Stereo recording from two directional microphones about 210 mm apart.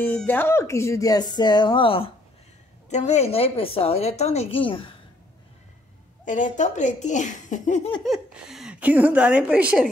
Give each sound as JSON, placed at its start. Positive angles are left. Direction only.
{"t": 0.0, "sound": "a woman's voice", "side_deg": 10}
{"t": 6.2, "sound": "speech", "side_deg": 35}
{"t": 8.0, "sound": "a woman's voice", "side_deg": 0}